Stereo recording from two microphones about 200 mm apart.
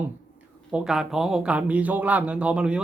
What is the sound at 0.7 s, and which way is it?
Speech, 5° right (ahead or behind).